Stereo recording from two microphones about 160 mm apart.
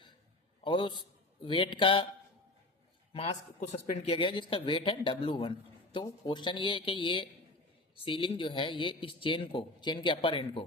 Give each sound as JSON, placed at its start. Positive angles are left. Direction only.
{"t": 0.6, "sound": "a man's voice", "side_deg": 30}
{"t": 3.1, "sound": "speech", "side_deg": 40}